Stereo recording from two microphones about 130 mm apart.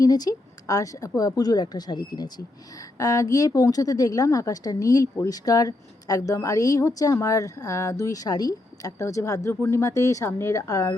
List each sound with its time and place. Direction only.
0.0 s a woman's voice: 30° left (ahead or behind)